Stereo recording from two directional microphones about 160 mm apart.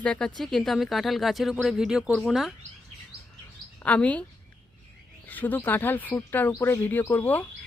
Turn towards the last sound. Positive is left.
turn(degrees=10)  # may be behind; listen again after turning